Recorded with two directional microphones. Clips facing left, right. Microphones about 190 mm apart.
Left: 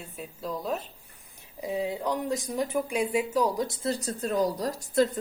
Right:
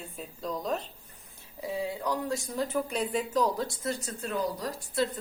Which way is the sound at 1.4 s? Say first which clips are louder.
Left 3 dB; 20° left (ahead or behind).